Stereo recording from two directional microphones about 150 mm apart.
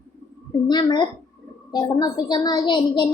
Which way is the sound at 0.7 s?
30° left (ahead or behind).